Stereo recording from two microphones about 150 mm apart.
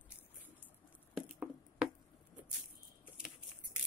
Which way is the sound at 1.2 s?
5° right (ahead or behind).